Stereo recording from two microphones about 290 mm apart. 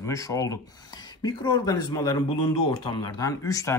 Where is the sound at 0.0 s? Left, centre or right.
Centre.